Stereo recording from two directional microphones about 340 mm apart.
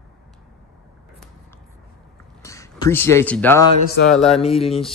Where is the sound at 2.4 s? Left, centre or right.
Centre.